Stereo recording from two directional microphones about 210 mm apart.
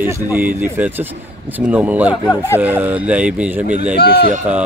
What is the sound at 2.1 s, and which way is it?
Speech, 15° left (ahead or behind).